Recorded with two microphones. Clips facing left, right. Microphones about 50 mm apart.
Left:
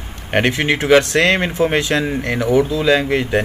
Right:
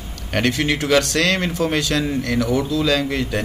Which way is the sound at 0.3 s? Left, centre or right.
Left.